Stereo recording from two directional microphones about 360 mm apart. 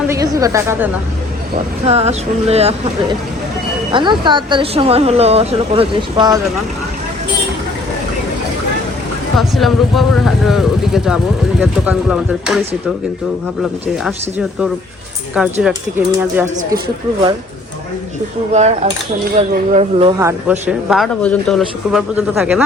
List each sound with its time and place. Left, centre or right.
0.1 s speech: centre
1.9 s speech: centre
9.4 s speech: centre
13.8 s speech: centre
18.5 s cutlery: centre
19.3 s speech: centre